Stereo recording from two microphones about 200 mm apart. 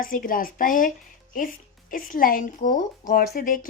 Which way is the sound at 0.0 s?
45° left (ahead or behind).